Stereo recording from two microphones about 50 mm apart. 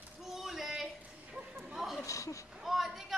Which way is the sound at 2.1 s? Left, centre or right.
Left.